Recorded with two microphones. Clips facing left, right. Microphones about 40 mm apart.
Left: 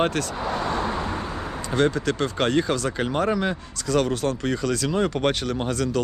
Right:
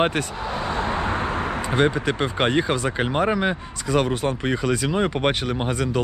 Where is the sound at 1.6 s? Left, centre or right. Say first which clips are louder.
Even; right.